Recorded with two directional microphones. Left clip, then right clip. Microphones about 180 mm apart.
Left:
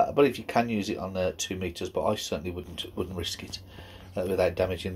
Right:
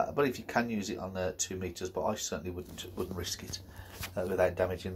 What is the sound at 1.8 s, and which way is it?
Speech, 30° left (ahead or behind).